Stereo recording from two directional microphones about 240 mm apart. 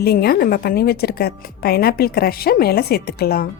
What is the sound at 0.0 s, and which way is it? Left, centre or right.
A woman's voice, left.